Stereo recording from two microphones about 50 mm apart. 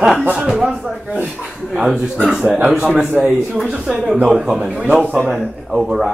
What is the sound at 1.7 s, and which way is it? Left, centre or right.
Chuckle, centre.